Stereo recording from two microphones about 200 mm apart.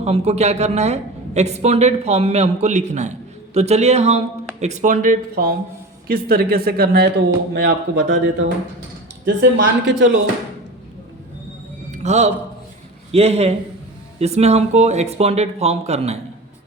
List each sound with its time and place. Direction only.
0.0 s a woman's voice: 30° right (ahead or behind); by 10.2 s 65° right (ahead or behind)
11.9 s a sound: 35° right (ahead or behind)
13.1 s a woman's voice: 30° right (ahead or behind)